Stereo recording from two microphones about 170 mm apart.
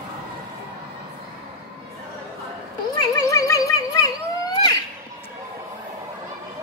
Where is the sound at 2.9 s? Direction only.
20° left (ahead or behind).